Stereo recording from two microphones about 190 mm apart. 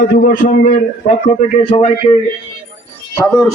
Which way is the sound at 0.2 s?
50° left (ahead or behind).